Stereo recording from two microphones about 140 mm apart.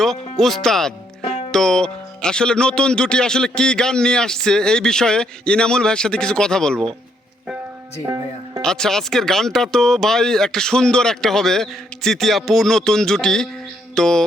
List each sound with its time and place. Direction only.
0.0 s speech: centre (ahead or behind)
8.0 s music: 20° right (ahead or behind)
8.6 s speech: 5° left (ahead or behind)